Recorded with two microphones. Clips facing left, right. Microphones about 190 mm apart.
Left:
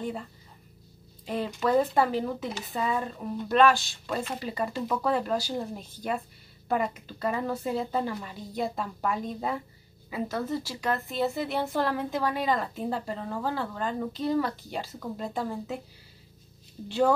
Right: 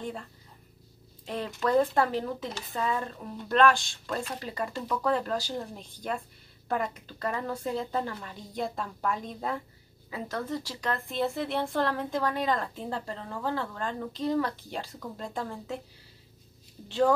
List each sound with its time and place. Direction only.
0.0 s a woman's voice: 5° left (ahead or behind)